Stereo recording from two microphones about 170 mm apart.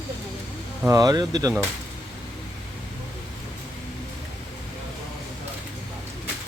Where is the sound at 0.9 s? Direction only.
20° right (ahead or behind).